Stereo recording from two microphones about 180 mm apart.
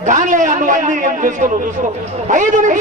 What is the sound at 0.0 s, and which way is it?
A man's voice, 40° right (ahead or behind).